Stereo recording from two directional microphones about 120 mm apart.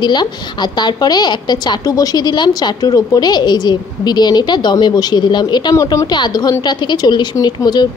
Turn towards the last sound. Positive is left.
turn(degrees=35)  # may be behind; listen again after turning